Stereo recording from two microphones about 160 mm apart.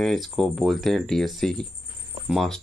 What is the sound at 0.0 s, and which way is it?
Speech, centre (ahead or behind).